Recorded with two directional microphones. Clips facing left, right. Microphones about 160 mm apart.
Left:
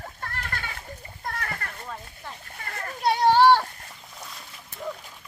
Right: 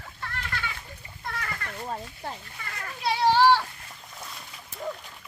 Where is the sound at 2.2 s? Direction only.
35° right (ahead or behind).